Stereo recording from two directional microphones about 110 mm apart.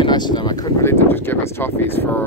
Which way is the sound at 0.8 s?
20° left (ahead or behind).